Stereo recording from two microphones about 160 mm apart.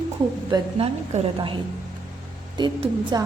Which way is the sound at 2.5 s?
30° right (ahead or behind).